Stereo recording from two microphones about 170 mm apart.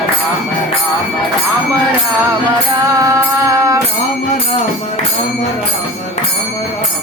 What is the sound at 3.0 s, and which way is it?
Mantra, 20° right (ahead or behind).